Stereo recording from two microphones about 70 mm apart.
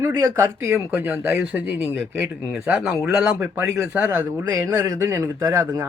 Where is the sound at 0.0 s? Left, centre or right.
Right.